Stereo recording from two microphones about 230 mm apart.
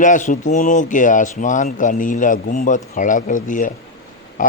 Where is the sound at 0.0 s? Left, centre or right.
Left.